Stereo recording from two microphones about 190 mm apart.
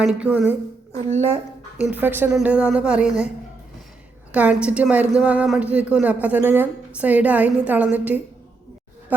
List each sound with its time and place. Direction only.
0.0 s a woman's voice: 5° right (ahead or behind)
0.9 s speech: 35° right (ahead or behind)
1.8 s a woman's voice: 10° right (ahead or behind)
4.3 s a woman's voice: 5° right (ahead or behind)